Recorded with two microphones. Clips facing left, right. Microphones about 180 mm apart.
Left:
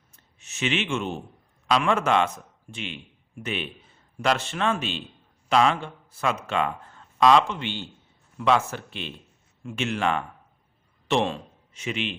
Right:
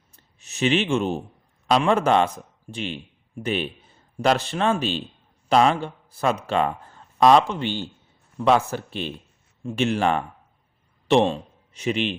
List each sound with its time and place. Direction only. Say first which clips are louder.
0.1 s a man's voice: right 2 dB; 35° right (ahead or behind)